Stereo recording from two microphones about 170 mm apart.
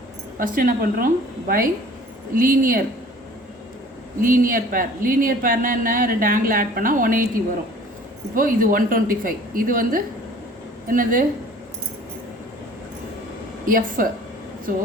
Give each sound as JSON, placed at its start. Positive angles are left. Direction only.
{"t": 0.3, "sound": "speech", "side_deg": -55}
{"t": 4.2, "sound": "speech", "side_deg": -55}
{"t": 8.4, "sound": "speech", "side_deg": -55}
{"t": 13.7, "sound": "speech", "side_deg": -55}